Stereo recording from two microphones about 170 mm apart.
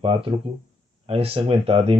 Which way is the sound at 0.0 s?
35° right (ahead or behind).